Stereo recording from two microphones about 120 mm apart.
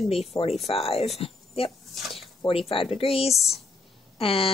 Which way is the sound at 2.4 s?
50° left (ahead or behind).